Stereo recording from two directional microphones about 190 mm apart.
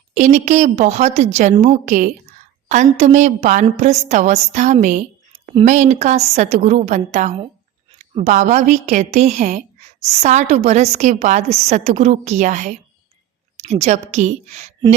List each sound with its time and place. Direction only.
0.1 s a woman's voice: 35° right (ahead or behind)